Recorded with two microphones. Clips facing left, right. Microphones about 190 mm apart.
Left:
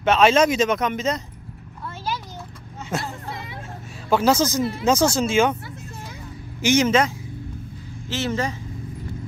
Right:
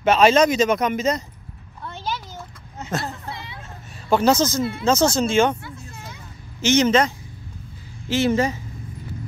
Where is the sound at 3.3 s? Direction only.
45° left (ahead or behind).